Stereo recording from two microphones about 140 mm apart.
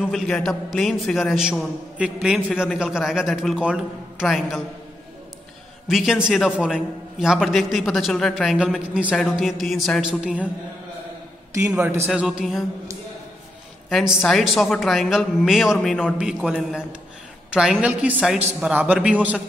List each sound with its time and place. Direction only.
0.0 s a man's voice: centre (ahead or behind)
5.9 s a man's voice: 5° right (ahead or behind)
11.5 s a man's voice: 15° right (ahead or behind)
12.1 s a man's voice: 5° right (ahead or behind)
13.8 s a man's voice: centre (ahead or behind)